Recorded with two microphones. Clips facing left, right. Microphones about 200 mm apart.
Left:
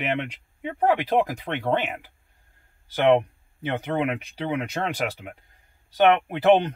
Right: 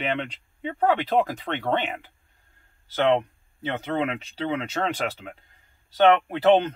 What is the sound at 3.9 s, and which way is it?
Speech, 15° left (ahead or behind).